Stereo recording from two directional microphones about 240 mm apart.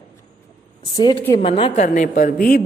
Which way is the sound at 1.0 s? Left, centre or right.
Centre.